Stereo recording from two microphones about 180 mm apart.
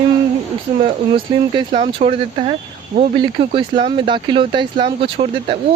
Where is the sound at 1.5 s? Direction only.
30° right (ahead or behind).